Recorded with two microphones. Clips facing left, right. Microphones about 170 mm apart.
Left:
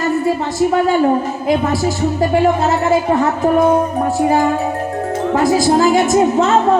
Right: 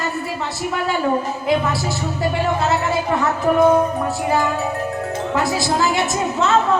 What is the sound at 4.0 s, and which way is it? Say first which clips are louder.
A woman's voice: left 6 dB; 40° left (ahead or behind).